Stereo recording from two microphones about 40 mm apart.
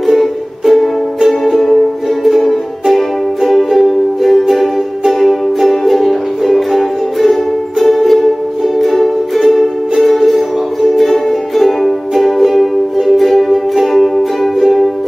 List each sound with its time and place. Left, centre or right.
0.0 s music: centre